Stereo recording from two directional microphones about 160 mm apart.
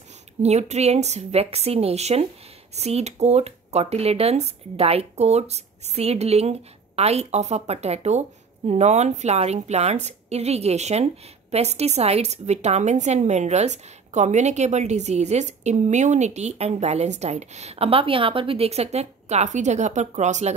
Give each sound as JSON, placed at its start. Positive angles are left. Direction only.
{"t": 0.4, "sound": "a woman's voice", "side_deg": -45}